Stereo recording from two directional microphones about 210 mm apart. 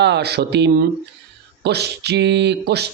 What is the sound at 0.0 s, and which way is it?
Speech, 50° right (ahead or behind).